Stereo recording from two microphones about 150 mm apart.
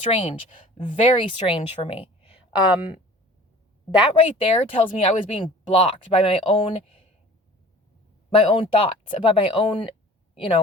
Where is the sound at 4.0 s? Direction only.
40° left (ahead or behind).